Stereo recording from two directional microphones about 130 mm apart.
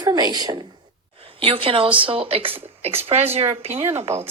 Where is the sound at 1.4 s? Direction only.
45° right (ahead or behind).